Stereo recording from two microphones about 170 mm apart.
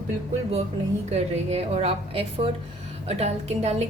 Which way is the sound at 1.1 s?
40° right (ahead or behind).